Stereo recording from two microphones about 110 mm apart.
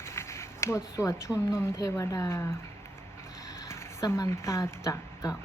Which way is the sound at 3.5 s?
25° left (ahead or behind).